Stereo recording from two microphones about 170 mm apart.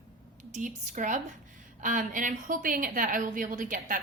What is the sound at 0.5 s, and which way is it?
A woman's voice, 50° right (ahead or behind).